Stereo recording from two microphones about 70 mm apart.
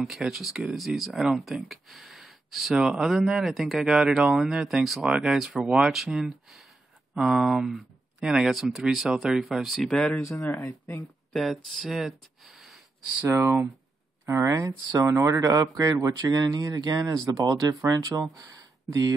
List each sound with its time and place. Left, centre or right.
0.0 s speech: centre
1.7 s a sound: centre
2.7 s speech: centre
3.9 s speech: centre
5.9 s speech: centre
9.8 s speech: centre
10.7 s speech: left
11.3 s speech: centre
13.3 s speech: right
18.4 s a sound: right